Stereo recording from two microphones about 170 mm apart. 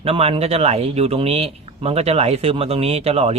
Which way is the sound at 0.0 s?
35° right (ahead or behind).